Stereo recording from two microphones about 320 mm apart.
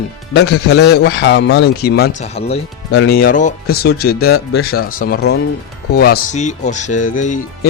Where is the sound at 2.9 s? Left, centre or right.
Left.